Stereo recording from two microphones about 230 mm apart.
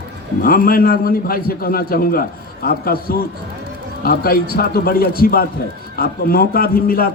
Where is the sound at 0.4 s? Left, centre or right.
Left.